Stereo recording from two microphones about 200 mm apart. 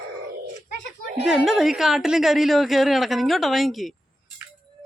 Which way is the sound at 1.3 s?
Centre (ahead or behind).